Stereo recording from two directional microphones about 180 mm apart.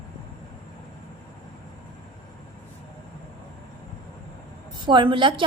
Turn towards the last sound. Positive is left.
turn(degrees=-25)  # may be behind; listen again after turning